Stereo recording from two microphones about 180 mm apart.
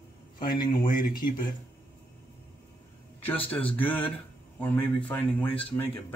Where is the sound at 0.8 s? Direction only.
50° left (ahead or behind).